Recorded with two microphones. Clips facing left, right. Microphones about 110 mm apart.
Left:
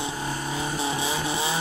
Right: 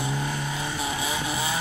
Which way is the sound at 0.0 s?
30° left (ahead or behind).